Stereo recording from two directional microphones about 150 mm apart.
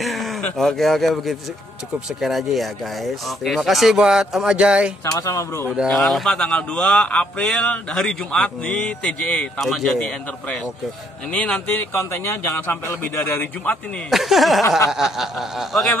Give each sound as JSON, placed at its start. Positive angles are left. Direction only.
{"t": 0.0, "sound": "speech", "side_deg": 0}
{"t": 5.0, "sound": "speech", "side_deg": 20}
{"t": 5.9, "sound": "speech", "side_deg": 0}
{"t": 14.1, "sound": "speech", "side_deg": 0}